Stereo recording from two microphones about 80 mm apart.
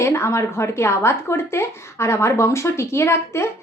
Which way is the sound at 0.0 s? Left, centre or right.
Left.